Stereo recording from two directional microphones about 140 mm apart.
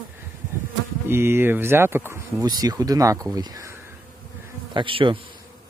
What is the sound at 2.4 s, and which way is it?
Speech, 30° right (ahead or behind).